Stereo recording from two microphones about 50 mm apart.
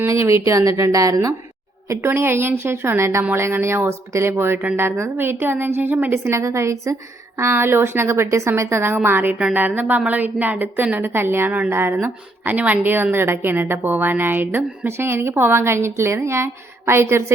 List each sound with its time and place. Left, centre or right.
0.0 s a woman's voice: right
2.0 s a woman's voice: right
6.1 s speech: right
7.3 s a woman's voice: right
9.0 s speech: right
9.4 s a woman's voice: right
10.9 s speech: right
12.5 s a woman's voice: right